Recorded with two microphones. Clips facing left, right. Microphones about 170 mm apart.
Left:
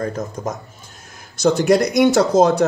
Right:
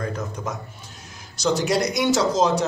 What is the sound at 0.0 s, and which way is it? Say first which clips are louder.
A man's voice: left 5 dB; 45° left (ahead or behind).